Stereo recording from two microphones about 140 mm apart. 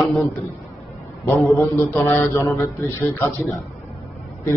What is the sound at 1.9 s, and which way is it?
Speech, 15° left (ahead or behind).